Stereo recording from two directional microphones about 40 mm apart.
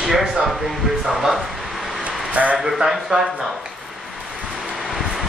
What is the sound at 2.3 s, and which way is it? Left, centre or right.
Speech, right.